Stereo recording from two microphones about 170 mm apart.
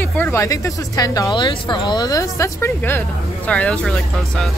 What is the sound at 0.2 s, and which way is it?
Speech, 15° left (ahead or behind).